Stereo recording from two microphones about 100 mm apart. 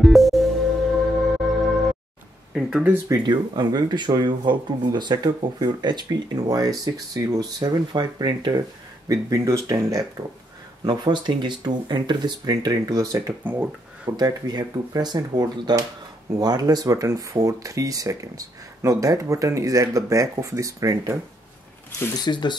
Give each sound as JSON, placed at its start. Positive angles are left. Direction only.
{"t": 0.0, "sound": "music", "side_deg": 0}
{"t": 2.5, "sound": "speech", "side_deg": -15}
{"t": 3.3, "sound": "speech", "side_deg": -45}
{"t": 10.8, "sound": "speech", "side_deg": -45}
{"t": 13.4, "sound": "speech", "side_deg": -15}
{"t": 14.1, "sound": "speech", "side_deg": -45}
{"t": 22.2, "sound": "speech", "side_deg": 50}